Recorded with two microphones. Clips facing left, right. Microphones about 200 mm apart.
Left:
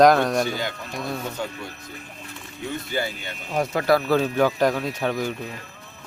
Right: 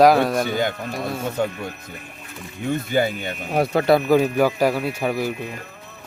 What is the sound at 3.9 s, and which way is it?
Speech, 15° right (ahead or behind).